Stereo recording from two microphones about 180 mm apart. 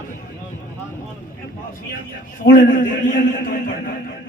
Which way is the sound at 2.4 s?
50° left (ahead or behind).